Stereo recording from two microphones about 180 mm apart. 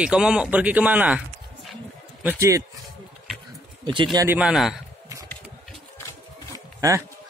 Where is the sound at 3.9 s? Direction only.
25° right (ahead or behind).